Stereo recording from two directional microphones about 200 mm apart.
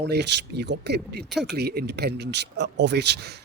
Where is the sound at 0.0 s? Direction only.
55° right (ahead or behind).